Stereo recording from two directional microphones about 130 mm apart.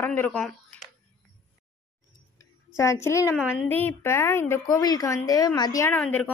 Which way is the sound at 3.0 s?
25° left (ahead or behind).